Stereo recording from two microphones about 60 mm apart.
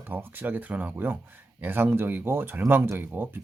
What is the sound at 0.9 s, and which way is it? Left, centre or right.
Speech, right.